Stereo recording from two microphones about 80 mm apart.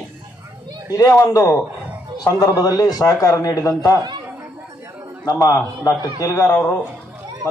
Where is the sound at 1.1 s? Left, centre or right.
Left.